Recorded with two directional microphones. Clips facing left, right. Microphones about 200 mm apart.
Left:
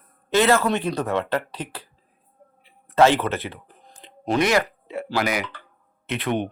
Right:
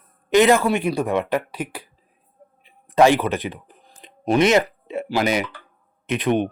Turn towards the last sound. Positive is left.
turn(degrees=-20)  # may be behind; listen again after turning